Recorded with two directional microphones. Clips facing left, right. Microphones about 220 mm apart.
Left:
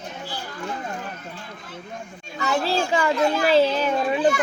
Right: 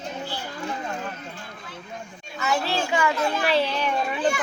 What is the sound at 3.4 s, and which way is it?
Speech, 45° left (ahead or behind).